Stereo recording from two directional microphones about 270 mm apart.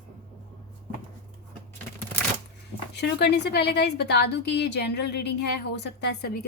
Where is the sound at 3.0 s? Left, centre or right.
Left.